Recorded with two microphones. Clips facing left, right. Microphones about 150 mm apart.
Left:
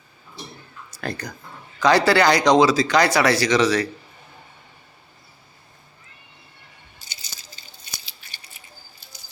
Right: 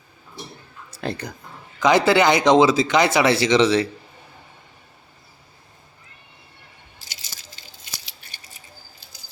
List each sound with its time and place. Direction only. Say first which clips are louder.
1.0 s speech: right 2 dB; 25° right (ahead or behind)